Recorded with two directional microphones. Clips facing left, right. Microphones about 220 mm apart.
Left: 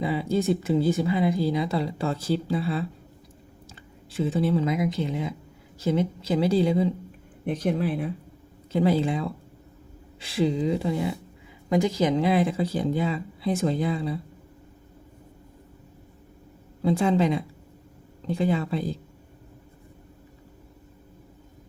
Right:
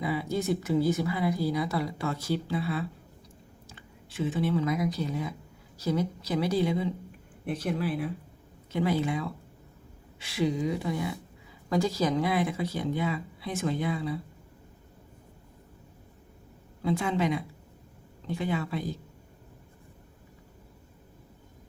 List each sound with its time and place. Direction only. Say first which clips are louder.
0.0 s speech: left 5 dB; 25° left (ahead or behind)
4.1 s speech: left 4 dB; 30° left (ahead or behind)
8.7 s speech: left 5 dB; 30° left (ahead or behind)
16.8 s speech: left 6 dB; 30° left (ahead or behind)